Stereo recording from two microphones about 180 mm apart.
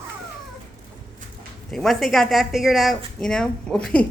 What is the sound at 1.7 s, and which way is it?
A woman's voice, centre (ahead or behind).